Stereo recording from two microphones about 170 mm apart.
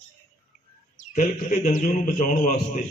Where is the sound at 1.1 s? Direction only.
45° left (ahead or behind).